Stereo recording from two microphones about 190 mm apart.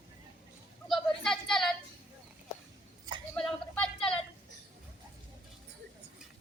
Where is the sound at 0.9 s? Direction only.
5° left (ahead or behind).